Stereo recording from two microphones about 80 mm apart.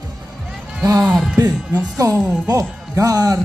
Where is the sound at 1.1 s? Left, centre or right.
Centre.